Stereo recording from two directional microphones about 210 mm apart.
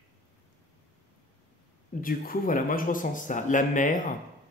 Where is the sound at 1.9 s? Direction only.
45° left (ahead or behind).